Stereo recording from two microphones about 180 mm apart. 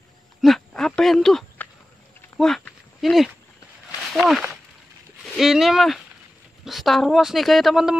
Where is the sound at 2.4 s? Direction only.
Centre (ahead or behind).